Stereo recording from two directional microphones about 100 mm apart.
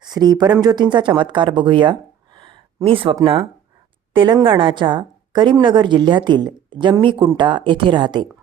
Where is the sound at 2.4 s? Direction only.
65° right (ahead or behind).